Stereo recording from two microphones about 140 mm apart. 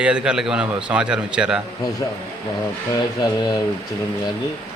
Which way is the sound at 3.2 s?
30° left (ahead or behind).